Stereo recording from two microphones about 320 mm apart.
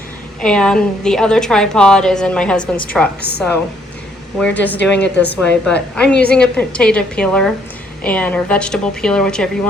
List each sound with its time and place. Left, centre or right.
0.4 s a woman's voice: centre